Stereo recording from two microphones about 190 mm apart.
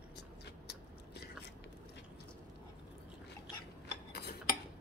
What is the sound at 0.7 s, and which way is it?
Biting, 60° left (ahead or behind).